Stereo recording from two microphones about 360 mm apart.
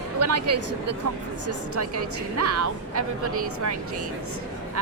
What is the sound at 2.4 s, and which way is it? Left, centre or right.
Speech, right.